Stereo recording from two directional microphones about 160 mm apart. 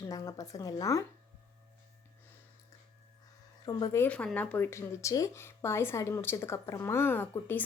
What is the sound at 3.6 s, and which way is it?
Speech, 25° left (ahead or behind).